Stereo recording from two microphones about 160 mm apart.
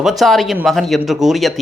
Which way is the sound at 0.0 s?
Centre (ahead or behind).